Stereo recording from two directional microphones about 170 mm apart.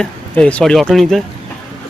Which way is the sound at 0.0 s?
5° left (ahead or behind).